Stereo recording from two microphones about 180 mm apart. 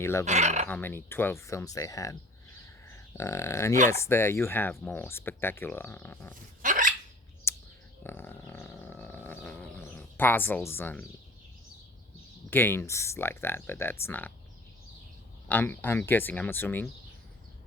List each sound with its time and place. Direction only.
0.0 s speech: 15° left (ahead or behind)
0.3 s speech: 40° right (ahead or behind)
0.7 s speech: 10° left (ahead or behind)
6.6 s hiccup: 45° right (ahead or behind)
7.5 s a sound: 15° left (ahead or behind)
12.5 s speech: 10° left (ahead or behind)
15.4 s speech: 10° left (ahead or behind)